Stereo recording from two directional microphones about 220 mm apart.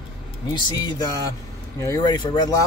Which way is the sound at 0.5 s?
20° left (ahead or behind).